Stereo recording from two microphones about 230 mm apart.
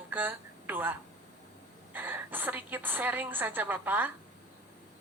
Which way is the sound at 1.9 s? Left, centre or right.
Centre.